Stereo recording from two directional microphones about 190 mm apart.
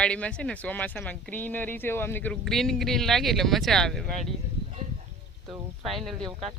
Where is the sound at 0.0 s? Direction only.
5° left (ahead or behind).